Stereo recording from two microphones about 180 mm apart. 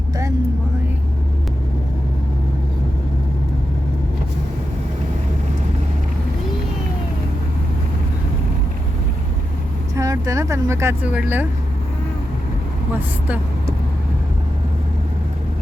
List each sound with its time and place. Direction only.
10.0 s speech: 15° right (ahead or behind)
13.0 s speech: 10° right (ahead or behind)